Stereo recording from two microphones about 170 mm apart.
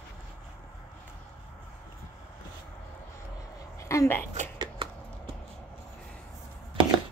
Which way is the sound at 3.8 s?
15° left (ahead or behind).